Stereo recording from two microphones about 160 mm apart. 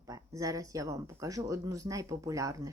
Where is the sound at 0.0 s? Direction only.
20° right (ahead or behind).